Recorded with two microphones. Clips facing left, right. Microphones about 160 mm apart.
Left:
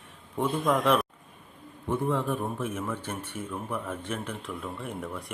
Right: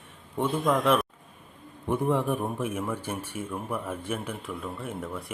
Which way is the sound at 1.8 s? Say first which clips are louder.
Right 2 dB; 15° right (ahead or behind).